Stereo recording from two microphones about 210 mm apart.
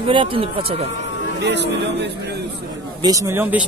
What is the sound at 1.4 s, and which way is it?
Speech, 55° right (ahead or behind).